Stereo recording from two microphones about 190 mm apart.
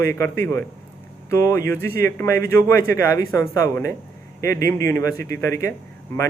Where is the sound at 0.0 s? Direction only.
15° left (ahead or behind).